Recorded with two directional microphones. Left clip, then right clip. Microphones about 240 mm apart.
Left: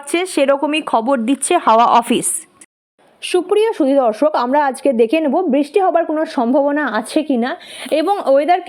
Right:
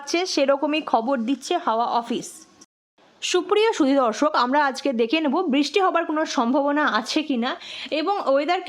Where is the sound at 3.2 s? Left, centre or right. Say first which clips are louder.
Left 5 dB; centre.